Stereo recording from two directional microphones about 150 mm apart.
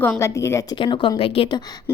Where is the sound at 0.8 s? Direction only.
35° left (ahead or behind).